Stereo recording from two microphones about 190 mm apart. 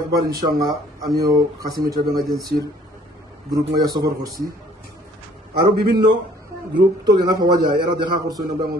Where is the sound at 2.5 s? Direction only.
50° right (ahead or behind).